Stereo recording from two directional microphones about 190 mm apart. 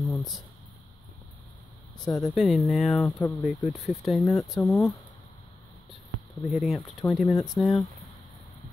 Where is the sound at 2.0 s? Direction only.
20° left (ahead or behind).